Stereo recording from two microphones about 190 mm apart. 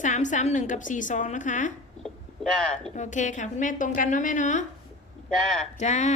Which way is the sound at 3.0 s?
40° left (ahead or behind).